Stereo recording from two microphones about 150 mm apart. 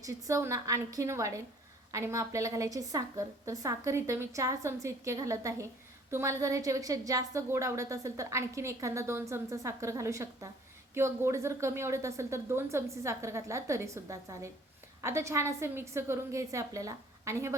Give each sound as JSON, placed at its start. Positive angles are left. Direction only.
{"t": 0.0, "sound": "a woman's voice", "side_deg": -20}